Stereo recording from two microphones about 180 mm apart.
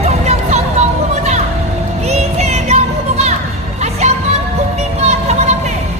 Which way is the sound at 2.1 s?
35° right (ahead or behind).